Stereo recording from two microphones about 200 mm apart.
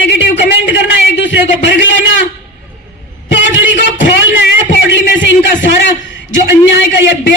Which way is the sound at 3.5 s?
65° left (ahead or behind).